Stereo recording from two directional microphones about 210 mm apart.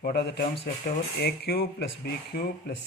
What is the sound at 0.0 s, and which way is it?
Speech, 50° left (ahead or behind).